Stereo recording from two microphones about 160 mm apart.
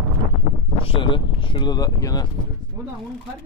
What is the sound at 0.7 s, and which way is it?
Speech, 35° left (ahead or behind).